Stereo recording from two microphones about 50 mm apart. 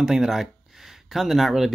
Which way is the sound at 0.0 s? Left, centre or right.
Centre.